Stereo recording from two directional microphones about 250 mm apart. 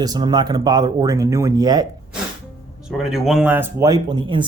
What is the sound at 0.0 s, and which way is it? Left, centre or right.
Speech, centre.